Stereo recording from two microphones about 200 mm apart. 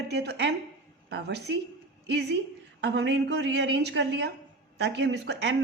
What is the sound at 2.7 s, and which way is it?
A woman's voice, 60° right (ahead or behind).